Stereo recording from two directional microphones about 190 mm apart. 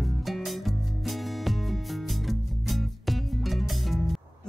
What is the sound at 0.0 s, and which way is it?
Music, centre (ahead or behind).